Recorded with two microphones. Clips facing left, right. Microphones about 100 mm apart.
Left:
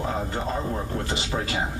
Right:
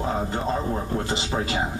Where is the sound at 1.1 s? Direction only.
25° right (ahead or behind).